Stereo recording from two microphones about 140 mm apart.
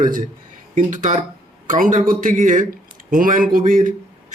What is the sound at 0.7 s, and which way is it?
A man's voice, 60° right (ahead or behind).